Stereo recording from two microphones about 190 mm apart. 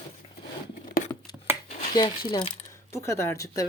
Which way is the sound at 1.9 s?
25° left (ahead or behind).